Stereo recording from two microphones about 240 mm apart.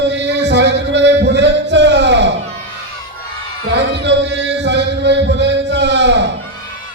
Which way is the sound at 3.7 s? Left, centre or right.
Right.